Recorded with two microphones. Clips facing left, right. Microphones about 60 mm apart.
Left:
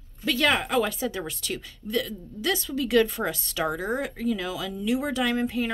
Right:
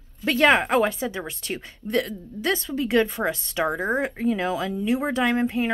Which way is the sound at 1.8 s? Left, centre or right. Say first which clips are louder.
Right 4 dB; right.